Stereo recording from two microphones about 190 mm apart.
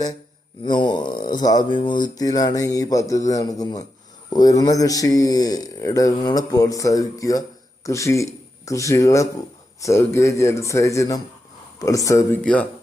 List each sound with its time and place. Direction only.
0.6 s speech: 25° left (ahead or behind)
12.4 s speech: 5° left (ahead or behind)